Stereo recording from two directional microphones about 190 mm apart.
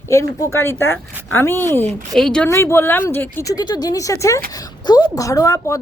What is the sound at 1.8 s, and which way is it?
Speech, 35° right (ahead or behind).